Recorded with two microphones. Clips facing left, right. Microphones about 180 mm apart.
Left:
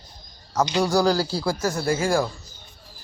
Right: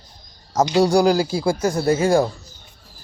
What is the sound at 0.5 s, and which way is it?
Speech, 40° right (ahead or behind).